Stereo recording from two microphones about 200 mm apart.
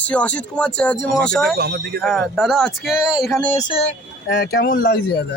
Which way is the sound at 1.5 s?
55° right (ahead or behind).